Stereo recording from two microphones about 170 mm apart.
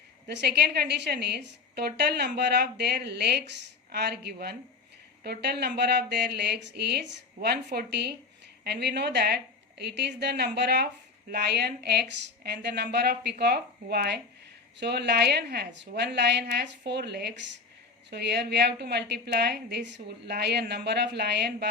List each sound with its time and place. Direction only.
0.3 s a woman's voice: 75° right (ahead or behind)